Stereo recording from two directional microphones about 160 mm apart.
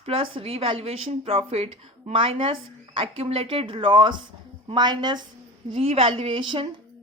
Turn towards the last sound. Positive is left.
turn(degrees=-35)  # may be behind; listen again after turning